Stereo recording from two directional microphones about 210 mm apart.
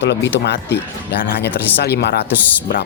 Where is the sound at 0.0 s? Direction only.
55° left (ahead or behind).